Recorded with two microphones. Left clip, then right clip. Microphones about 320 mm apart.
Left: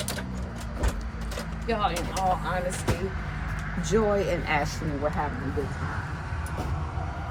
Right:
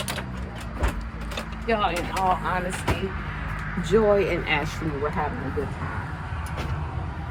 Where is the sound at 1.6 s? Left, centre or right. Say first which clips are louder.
Right 3 dB; centre.